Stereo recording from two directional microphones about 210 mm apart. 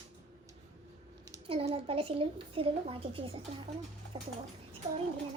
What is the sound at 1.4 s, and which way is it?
A woman's voice, 25° right (ahead or behind).